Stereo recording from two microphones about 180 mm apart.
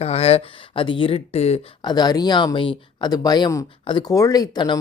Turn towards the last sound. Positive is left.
turn(degrees=20)  # may be behind; listen again after turning